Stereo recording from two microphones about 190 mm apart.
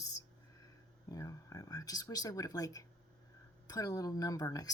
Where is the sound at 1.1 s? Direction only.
20° left (ahead or behind).